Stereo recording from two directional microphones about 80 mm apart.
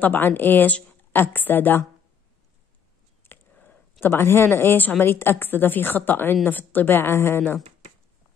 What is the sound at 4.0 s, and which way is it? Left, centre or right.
Speech, left.